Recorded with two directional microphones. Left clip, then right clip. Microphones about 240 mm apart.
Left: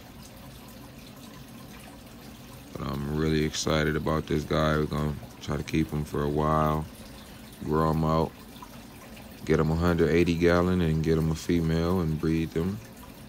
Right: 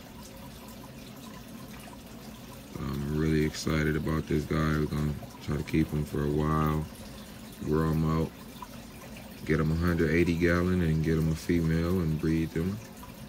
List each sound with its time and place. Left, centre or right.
3.2 s speech: centre
9.5 s speech: centre